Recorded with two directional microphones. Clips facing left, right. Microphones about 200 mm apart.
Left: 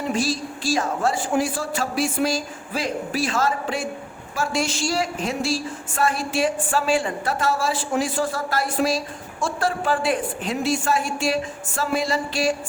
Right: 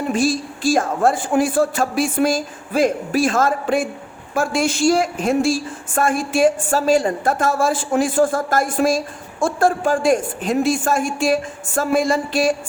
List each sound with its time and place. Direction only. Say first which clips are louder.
0.1 s a woman's voice: right 6 dB; 50° right (ahead or behind)